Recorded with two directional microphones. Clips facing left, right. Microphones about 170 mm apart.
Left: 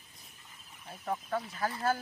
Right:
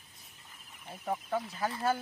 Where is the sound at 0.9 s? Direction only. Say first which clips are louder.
Right 1 dB; 5° right (ahead or behind).